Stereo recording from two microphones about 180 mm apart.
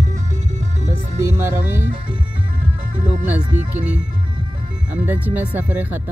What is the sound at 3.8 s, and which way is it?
Music, 5° right (ahead or behind).